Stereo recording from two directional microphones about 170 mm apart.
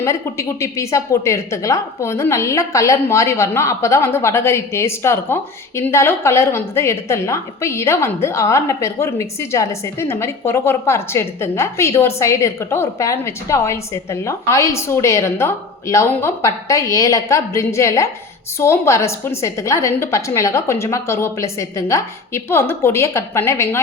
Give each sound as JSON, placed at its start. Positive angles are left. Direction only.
{"t": 0.0, "sound": "a woman's voice", "side_deg": 15}